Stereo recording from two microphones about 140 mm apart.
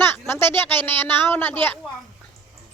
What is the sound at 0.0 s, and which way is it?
A woman's voice, 15° left (ahead or behind).